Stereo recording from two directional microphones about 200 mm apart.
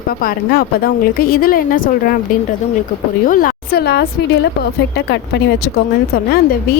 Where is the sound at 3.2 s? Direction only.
45° left (ahead or behind).